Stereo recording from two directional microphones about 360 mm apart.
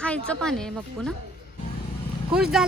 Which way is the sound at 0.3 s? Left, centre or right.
Centre.